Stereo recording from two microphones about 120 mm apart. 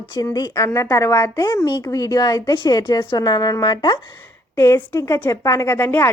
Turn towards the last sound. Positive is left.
turn(degrees=20)  # may be behind; listen again after turning